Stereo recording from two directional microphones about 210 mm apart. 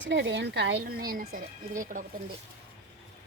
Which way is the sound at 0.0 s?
60° right (ahead or behind).